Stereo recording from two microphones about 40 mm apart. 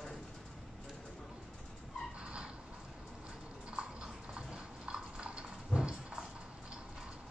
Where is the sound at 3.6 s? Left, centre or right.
Right.